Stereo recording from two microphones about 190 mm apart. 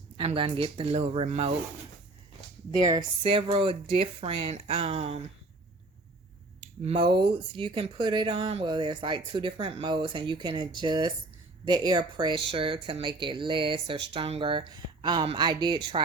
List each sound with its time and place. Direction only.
0.2 s speech: 30° right (ahead or behind)
2.8 s speech: 25° right (ahead or behind)
6.8 s speech: 25° right (ahead or behind)